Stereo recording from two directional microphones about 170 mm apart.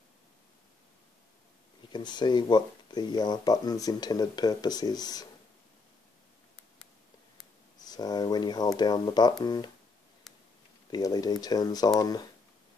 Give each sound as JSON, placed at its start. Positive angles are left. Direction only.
{"t": 1.9, "sound": "speech", "side_deg": 25}
{"t": 7.8, "sound": "speech", "side_deg": 25}
{"t": 10.9, "sound": "speech", "side_deg": 20}